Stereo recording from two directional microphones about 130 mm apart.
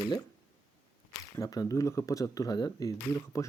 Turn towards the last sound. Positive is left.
turn(degrees=25)  # may be behind; listen again after turning